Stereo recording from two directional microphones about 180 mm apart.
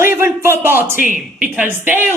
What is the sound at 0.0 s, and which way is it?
A woman's voice, 15° right (ahead or behind).